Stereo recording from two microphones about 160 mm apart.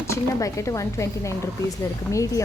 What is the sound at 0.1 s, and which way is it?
Speech, 20° left (ahead or behind).